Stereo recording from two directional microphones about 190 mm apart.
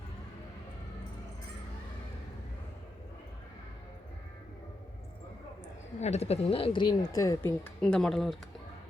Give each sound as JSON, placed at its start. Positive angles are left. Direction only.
{"t": 6.0, "sound": "a woman's voice", "side_deg": 35}
{"t": 7.6, "sound": "speech", "side_deg": 5}